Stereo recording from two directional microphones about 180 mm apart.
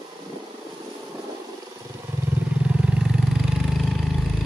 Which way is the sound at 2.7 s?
5° right (ahead or behind).